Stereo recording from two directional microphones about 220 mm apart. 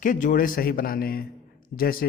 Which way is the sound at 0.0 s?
35° left (ahead or behind).